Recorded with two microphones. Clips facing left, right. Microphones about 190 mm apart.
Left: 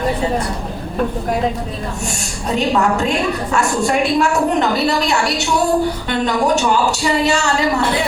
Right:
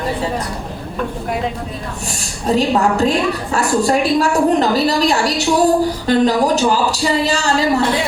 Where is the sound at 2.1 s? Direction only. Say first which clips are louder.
Right 6 dB; 35° right (ahead or behind).